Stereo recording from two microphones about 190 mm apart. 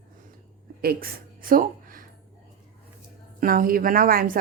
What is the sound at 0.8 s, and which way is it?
Speech, 50° right (ahead or behind).